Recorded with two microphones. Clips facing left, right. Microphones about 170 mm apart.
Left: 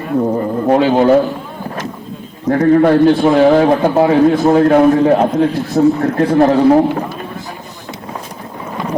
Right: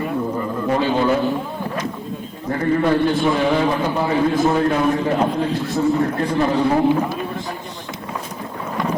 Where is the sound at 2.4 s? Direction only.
80° left; by 5.2 s 65° left (ahead or behind).